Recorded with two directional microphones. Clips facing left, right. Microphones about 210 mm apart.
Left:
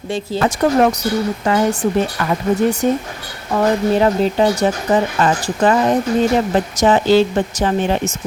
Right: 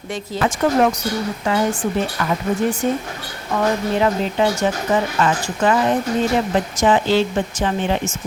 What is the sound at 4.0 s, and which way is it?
Speech, 35° left (ahead or behind).